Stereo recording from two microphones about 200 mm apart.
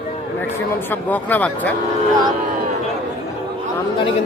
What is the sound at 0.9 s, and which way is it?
Speech, 10° left (ahead or behind).